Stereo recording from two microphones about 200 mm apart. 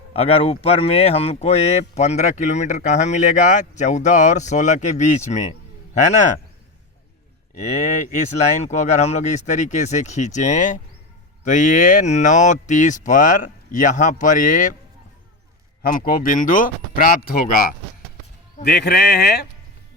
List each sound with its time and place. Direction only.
0.1 s speech: 30° left (ahead or behind)
8.6 s speech: 35° left (ahead or behind)
15.8 s speech: 45° left (ahead or behind)